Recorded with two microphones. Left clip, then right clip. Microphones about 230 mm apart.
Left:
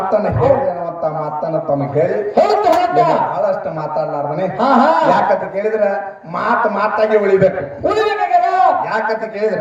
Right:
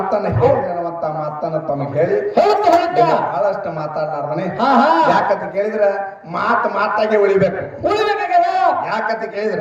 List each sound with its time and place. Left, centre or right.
0.4 s a man's voice: right
2.0 s a man's voice: right
4.6 s a man's voice: right